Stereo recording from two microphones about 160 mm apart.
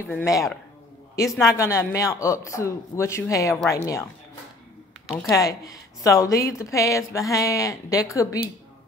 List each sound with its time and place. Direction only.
0.0 s a woman's voice: 15° left (ahead or behind)
5.3 s a woman's voice: 20° left (ahead or behind)